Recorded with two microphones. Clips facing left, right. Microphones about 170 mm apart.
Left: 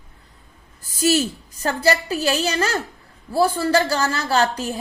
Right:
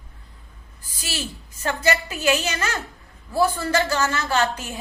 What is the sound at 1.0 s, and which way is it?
A woman's voice, 45° left (ahead or behind).